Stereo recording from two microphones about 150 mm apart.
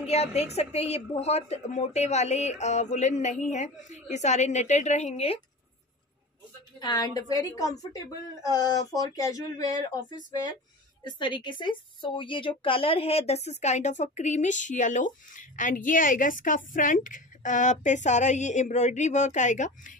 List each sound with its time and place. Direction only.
0.0 s a woman's voice: 45° left (ahead or behind)
6.8 s a woman's voice: 25° left (ahead or behind); by 20.0 s 55° left (ahead or behind)